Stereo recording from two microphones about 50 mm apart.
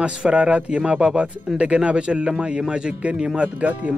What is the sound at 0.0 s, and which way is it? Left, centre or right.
Speech, right.